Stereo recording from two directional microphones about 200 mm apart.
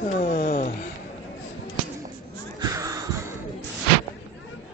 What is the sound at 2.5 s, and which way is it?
Music, 15° right (ahead or behind).